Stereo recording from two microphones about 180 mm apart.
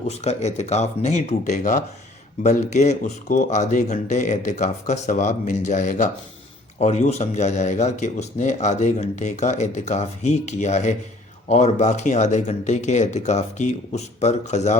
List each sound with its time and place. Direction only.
0.1 s a man's voice: 35° left (ahead or behind)